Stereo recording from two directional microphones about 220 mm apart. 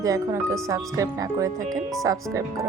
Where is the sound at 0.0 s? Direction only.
15° right (ahead or behind).